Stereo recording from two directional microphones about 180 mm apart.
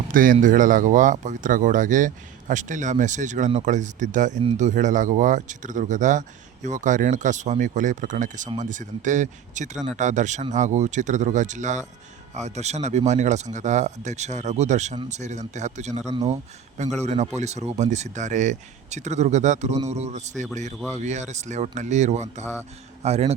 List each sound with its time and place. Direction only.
0.1 s speech: 50° right (ahead or behind)